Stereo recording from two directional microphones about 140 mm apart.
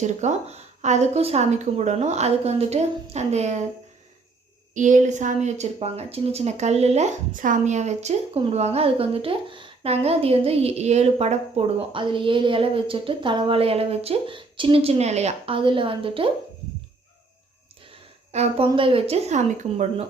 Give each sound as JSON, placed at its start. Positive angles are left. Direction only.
{"t": 0.0, "sound": "a woman's voice", "side_deg": -55}
{"t": 4.7, "sound": "a woman's voice", "side_deg": -65}
{"t": 18.3, "sound": "a woman's voice", "side_deg": -45}